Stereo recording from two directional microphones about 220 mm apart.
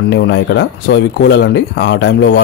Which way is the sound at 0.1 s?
50° left (ahead or behind).